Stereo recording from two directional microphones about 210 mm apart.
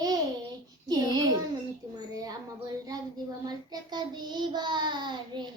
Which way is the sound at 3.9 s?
20° right (ahead or behind).